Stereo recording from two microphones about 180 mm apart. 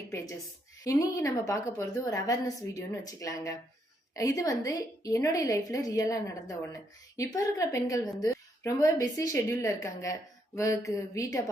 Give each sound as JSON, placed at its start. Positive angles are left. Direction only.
{"t": 0.9, "sound": "a woman's voice", "side_deg": 15}